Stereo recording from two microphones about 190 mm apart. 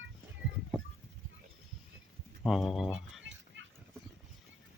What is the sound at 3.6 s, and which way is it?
Clip-clop, 75° right (ahead or behind).